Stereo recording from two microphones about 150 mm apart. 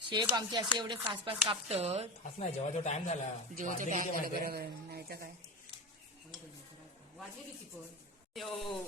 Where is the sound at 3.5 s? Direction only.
60° right (ahead or behind); by 5.3 s 85° right.